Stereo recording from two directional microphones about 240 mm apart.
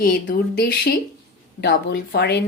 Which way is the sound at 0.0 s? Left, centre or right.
Left.